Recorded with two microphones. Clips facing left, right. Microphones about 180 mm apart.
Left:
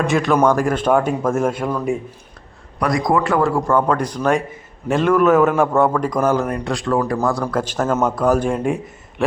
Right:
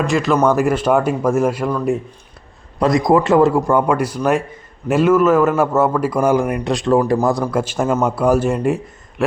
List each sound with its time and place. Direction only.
0.0 s speech: centre (ahead or behind)
2.7 s a man's voice: 25° right (ahead or behind)
7.4 s a man's voice: 10° right (ahead or behind)